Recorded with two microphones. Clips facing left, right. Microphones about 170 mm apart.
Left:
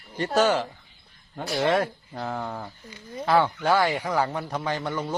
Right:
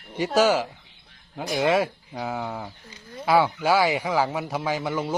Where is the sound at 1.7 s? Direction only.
5° right (ahead or behind).